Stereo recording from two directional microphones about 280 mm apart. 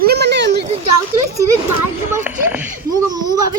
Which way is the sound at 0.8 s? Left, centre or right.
Right.